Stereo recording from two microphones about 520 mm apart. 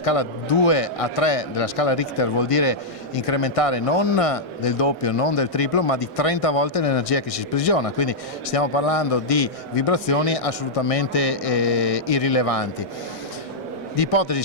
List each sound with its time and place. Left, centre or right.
0.0 s speech: left
13.9 s speech: left